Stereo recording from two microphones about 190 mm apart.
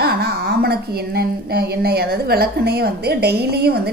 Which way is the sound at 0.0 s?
55° right (ahead or behind).